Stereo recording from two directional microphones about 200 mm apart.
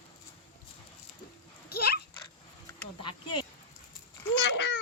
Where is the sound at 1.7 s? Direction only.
50° left (ahead or behind).